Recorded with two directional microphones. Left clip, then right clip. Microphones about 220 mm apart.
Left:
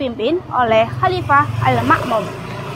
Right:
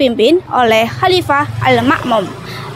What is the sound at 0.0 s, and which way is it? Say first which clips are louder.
A woman's voice: right 9 dB; 55° right (ahead or behind).